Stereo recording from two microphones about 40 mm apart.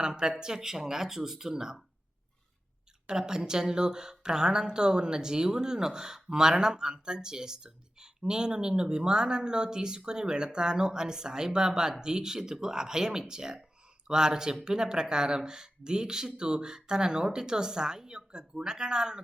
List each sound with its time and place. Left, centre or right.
0.1 s speech: centre
3.1 s speech: centre